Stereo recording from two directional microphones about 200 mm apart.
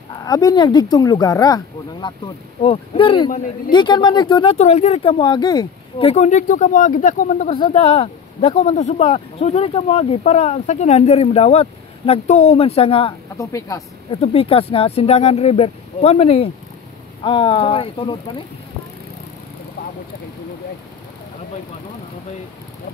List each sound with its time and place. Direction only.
0.1 s speech: 20° left (ahead or behind)
3.3 s speech: 40° left (ahead or behind)
3.7 s speech: 20° left (ahead or behind); by 7.5 s 40° left (ahead or behind)
7.5 s speech: 25° left (ahead or behind)
13.4 s a woman's voice: 15° left (ahead or behind)
14.2 s speech: 30° left (ahead or behind)